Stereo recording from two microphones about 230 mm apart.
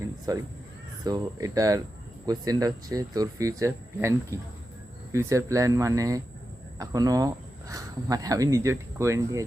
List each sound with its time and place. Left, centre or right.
0.3 s speech: centre